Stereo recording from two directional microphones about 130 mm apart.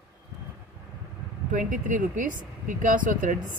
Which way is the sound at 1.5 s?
85° right.